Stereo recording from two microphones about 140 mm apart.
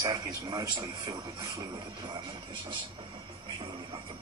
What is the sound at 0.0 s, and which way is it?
A man's voice, 25° right (ahead or behind).